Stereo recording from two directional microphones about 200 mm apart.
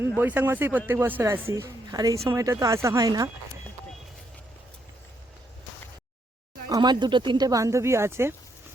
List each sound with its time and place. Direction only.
0.2 s speech: 10° right (ahead or behind)
6.7 s speech: 20° right (ahead or behind)